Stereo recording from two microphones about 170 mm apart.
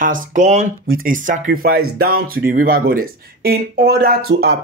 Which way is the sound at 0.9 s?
55° right (ahead or behind).